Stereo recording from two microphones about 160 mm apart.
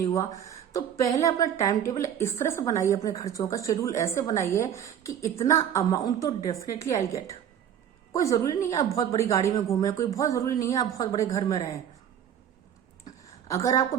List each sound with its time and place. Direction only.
0.0 s a woman's voice: 20° left (ahead or behind)
13.5 s a woman's voice: 20° left (ahead or behind)